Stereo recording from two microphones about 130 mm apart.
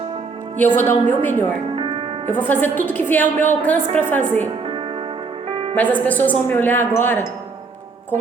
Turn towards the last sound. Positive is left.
turn(degrees=15)  # may be behind; listen again after turning